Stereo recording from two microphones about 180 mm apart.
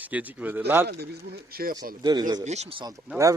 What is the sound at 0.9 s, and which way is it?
Speech, 60° right (ahead or behind).